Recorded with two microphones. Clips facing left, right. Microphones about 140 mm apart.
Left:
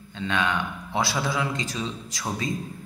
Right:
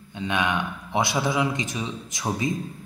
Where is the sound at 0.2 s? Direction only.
20° right (ahead or behind).